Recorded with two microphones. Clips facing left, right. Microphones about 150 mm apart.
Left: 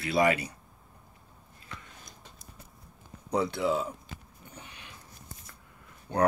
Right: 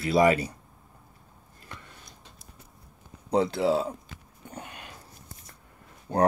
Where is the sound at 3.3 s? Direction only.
30° right (ahead or behind).